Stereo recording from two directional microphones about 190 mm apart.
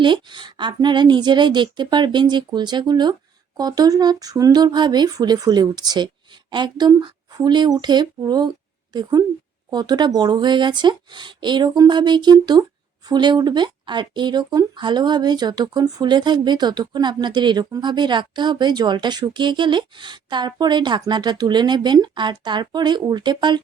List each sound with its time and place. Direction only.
0.0 s speech: 25° right (ahead or behind)